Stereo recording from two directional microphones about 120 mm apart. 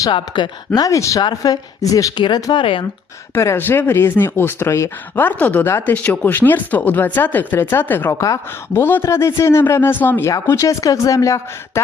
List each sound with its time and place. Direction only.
0.0 s speech: 40° left (ahead or behind)
2.2 s speech: 40° left (ahead or behind)
3.3 s speech: 20° left (ahead or behind)
8.2 s speech: 30° left (ahead or behind)